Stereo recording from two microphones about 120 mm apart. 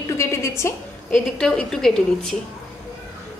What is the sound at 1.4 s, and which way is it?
Speech, 5° left (ahead or behind).